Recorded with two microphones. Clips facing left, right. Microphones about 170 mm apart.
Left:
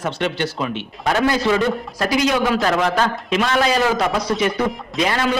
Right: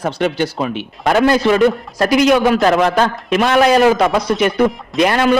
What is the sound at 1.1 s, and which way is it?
A man's voice, 65° right (ahead or behind).